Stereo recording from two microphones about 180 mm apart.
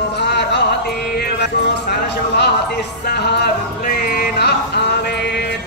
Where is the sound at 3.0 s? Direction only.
65° left (ahead or behind).